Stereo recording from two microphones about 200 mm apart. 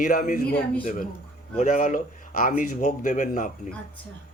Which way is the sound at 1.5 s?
40° left (ahead or behind).